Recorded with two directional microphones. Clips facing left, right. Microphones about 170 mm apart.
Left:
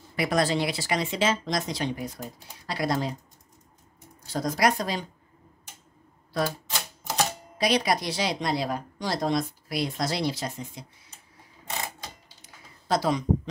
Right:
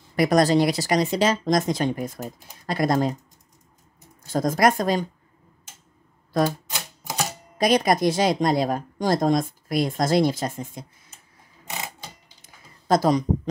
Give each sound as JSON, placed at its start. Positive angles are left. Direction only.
{"t": 0.1, "sound": "a woman's voice", "side_deg": -40}
{"t": 4.3, "sound": "a woman's voice", "side_deg": -50}
{"t": 6.3, "sound": "a woman's voice", "side_deg": -45}
{"t": 7.5, "sound": "a woman's voice", "side_deg": -45}
{"t": 12.4, "sound": "a sound", "side_deg": -45}